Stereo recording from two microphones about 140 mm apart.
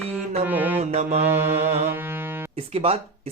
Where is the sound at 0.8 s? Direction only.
55° right (ahead or behind).